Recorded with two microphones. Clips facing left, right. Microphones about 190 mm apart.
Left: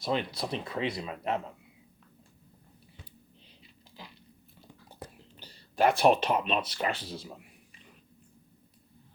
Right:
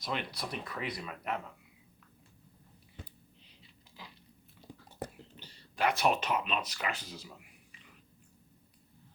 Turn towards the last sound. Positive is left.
turn(degrees=30)  # may be behind; listen again after turning